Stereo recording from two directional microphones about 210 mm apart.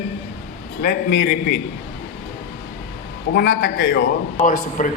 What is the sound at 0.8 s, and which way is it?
Speech, 45° left (ahead or behind).